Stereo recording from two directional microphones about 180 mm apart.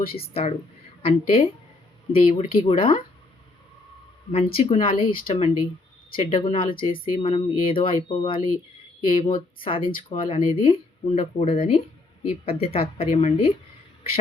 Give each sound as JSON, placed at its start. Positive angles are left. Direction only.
{"t": 0.1, "sound": "speech", "side_deg": 35}
{"t": 4.3, "sound": "speech", "side_deg": 35}
{"t": 6.7, "sound": "speech", "side_deg": 50}
{"t": 7.2, "sound": "speech", "side_deg": 30}